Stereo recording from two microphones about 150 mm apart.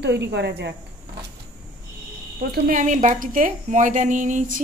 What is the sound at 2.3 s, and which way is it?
Speech, 65° right (ahead or behind).